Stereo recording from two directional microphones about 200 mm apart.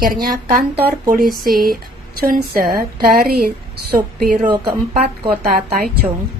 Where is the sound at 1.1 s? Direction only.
45° right (ahead or behind).